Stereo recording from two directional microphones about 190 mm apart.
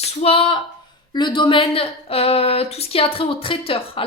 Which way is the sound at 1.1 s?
25° left (ahead or behind).